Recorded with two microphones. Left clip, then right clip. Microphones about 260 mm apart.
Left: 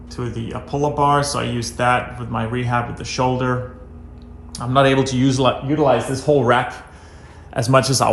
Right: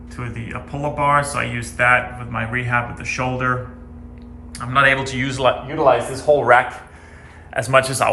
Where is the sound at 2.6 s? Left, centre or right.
Centre.